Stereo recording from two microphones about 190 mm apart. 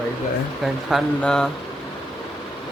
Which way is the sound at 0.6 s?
Centre (ahead or behind).